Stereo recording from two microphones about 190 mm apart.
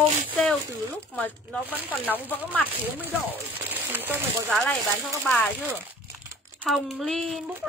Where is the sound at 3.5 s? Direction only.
10° right (ahead or behind).